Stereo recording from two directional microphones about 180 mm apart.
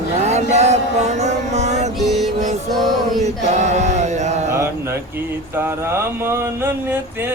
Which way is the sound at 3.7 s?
40° right (ahead or behind).